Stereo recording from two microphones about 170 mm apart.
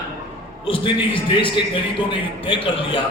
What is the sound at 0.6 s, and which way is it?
A man's voice, 30° left (ahead or behind).